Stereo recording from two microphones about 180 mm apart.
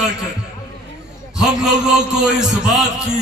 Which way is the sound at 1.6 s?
Centre (ahead or behind).